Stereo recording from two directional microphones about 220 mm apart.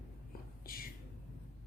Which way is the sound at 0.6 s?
40° left (ahead or behind).